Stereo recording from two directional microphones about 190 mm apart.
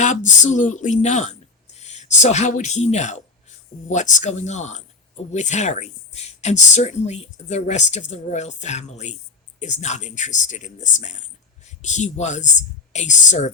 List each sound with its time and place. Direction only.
0.0 s speech: 40° left (ahead or behind)